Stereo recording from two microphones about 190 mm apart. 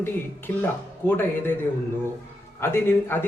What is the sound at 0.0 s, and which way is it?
Speech, 10° left (ahead or behind).